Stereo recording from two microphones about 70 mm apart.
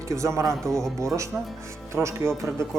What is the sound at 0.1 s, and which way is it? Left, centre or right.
A woman's voice, right.